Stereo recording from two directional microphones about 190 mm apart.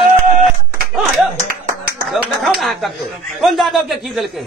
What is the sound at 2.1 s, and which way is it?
A man's voice, centre (ahead or behind).